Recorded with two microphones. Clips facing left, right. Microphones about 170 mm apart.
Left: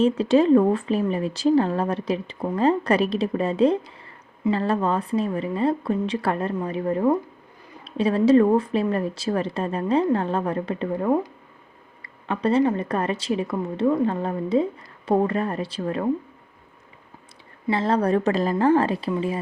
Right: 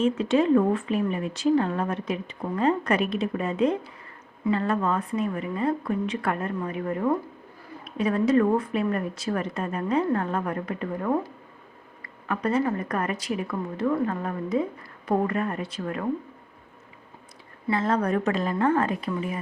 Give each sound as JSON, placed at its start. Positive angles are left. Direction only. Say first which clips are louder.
{"t": 0.0, "sound": "a woman's voice", "louder": "left 4 dB", "side_deg": 35}
{"t": 17.7, "sound": "a woman's voice", "louder": "left 3 dB", "side_deg": 30}